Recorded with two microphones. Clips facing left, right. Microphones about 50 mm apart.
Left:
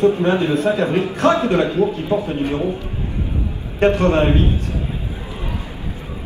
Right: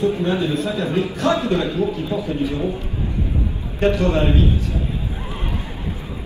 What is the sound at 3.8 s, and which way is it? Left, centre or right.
Speech, left.